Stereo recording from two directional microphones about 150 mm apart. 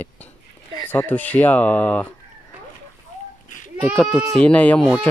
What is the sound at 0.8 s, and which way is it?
Speech, 10° left (ahead or behind).